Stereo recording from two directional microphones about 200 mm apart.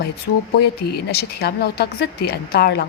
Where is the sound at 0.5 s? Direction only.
50° left (ahead or behind).